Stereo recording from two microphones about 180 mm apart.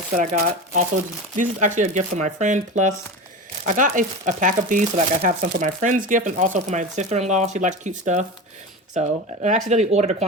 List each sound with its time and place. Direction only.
0.2 s speech: 45° right (ahead or behind)